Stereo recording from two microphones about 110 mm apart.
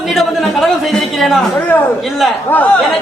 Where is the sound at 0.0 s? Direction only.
Centre (ahead or behind).